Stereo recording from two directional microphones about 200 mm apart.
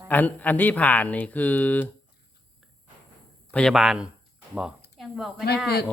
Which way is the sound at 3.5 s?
5° left (ahead or behind).